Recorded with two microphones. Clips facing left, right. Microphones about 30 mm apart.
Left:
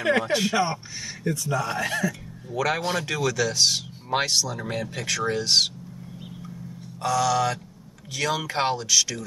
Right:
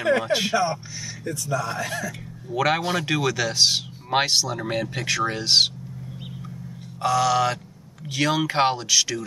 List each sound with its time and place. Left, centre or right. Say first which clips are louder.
0.2 s speech: right 1 dB; right
0.6 s speech: right 1 dB; left
1.8 s speech: left 3 dB; left
2.1 s a man's voice: right 3 dB; right
7.0 s speech: right 2 dB; centre